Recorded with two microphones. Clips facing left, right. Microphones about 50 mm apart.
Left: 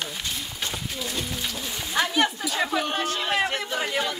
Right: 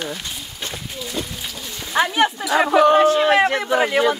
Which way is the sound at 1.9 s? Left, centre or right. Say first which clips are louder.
Right 6 dB; right.